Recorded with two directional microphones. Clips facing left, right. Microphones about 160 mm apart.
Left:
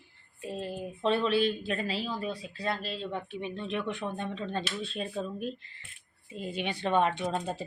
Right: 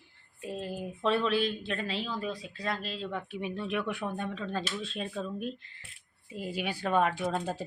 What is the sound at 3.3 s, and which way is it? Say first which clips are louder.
Speech: right 1 dB; 10° right (ahead or behind).